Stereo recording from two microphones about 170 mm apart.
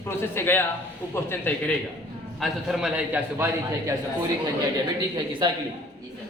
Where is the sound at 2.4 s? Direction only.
Centre (ahead or behind).